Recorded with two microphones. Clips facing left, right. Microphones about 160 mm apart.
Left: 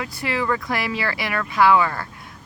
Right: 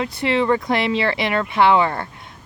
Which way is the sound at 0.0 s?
25° right (ahead or behind).